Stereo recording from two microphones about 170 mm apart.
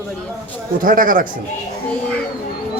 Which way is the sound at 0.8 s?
55° right (ahead or behind).